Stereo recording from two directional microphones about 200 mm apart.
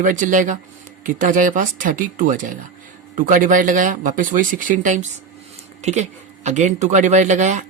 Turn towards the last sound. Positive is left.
turn(degrees=-40)  # may be behind; listen again after turning